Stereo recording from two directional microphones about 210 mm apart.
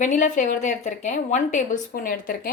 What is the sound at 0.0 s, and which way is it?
A woman's voice, 35° left (ahead or behind).